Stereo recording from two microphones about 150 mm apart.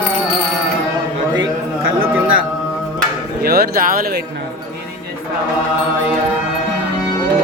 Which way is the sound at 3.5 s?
85° right.